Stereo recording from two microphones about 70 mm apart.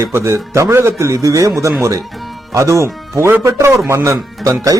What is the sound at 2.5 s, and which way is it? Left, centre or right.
Speech, right.